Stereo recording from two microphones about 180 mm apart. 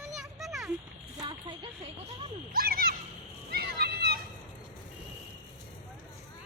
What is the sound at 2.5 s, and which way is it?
Speech, 55° right (ahead or behind).